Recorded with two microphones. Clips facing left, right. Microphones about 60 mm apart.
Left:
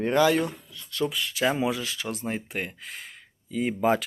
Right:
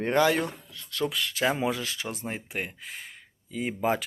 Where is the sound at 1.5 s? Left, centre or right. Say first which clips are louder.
Left 2 dB; right.